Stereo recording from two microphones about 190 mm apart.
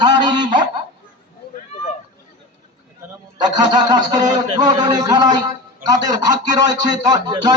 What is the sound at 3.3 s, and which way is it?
Speech, 20° right (ahead or behind).